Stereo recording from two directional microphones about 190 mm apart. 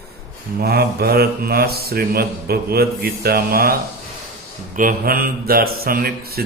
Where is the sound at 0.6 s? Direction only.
55° right (ahead or behind).